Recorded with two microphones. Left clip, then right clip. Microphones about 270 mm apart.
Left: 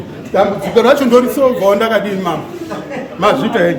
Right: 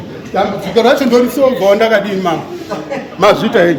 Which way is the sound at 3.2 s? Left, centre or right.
Centre.